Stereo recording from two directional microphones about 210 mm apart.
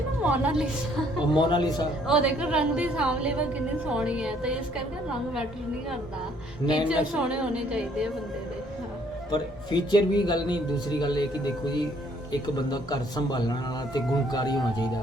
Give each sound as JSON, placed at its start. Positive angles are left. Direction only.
{"t": 0.2, "sound": "a woman's voice", "side_deg": -5}
{"t": 1.3, "sound": "speech", "side_deg": 20}
{"t": 2.0, "sound": "a woman's voice", "side_deg": -5}
{"t": 6.8, "sound": "a woman's voice", "side_deg": -5}
{"t": 9.3, "sound": "speech", "side_deg": 20}
{"t": 12.3, "sound": "speech", "side_deg": 20}